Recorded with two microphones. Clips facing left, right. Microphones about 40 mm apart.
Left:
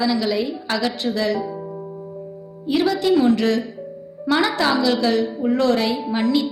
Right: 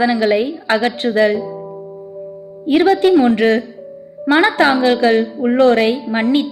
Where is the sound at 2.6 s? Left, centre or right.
Right.